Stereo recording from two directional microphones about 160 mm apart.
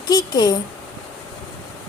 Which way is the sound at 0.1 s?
25° left (ahead or behind).